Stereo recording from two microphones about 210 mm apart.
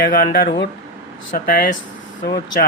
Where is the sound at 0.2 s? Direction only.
45° left (ahead or behind).